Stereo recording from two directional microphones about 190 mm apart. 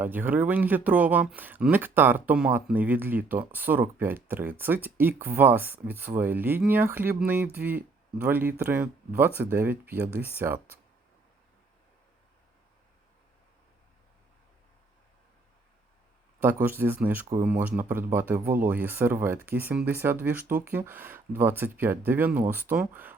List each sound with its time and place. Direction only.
0.0 s speech: 10° right (ahead or behind)
16.4 s speech: 10° right (ahead or behind)